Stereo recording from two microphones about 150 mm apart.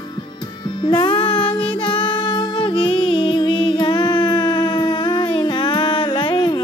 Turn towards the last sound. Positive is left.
turn(degrees=30)  # may be behind; listen again after turning